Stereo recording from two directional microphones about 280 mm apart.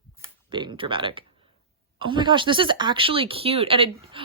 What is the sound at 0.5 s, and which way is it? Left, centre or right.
A woman's voice, centre.